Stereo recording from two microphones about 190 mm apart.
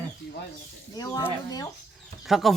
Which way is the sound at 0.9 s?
20° left (ahead or behind).